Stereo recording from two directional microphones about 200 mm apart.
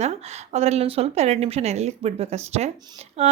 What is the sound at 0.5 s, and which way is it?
Speech, 30° right (ahead or behind).